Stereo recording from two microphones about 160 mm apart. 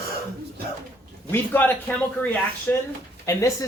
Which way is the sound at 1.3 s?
10° left (ahead or behind).